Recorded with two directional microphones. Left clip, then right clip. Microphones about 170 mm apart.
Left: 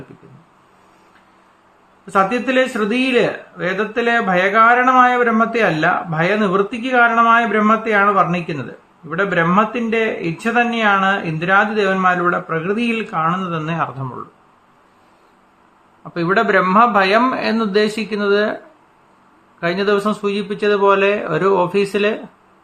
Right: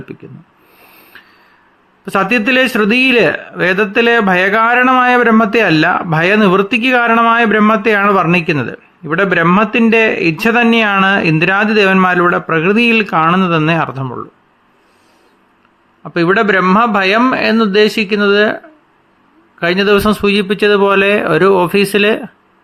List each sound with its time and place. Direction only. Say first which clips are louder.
2.0 s a man's voice: right 4 dB; 55° right (ahead or behind)
16.0 s speech: right 5 dB; 40° right (ahead or behind)
19.5 s speech: right 6 dB; 35° right (ahead or behind)